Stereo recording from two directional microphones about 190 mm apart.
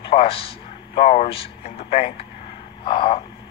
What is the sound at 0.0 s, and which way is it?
A man's voice, 30° left (ahead or behind).